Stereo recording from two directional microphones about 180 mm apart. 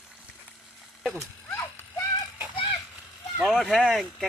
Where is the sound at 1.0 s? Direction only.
5° left (ahead or behind).